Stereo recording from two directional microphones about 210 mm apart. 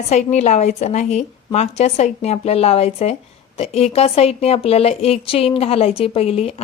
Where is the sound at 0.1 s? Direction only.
35° left (ahead or behind).